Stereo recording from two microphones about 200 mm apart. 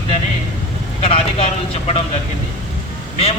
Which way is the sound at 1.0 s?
30° left (ahead or behind).